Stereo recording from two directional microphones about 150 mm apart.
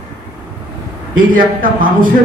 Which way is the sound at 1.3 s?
65° right (ahead or behind).